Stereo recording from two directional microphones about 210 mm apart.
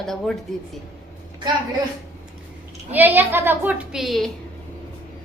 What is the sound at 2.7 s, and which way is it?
A woman's voice, 10° right (ahead or behind).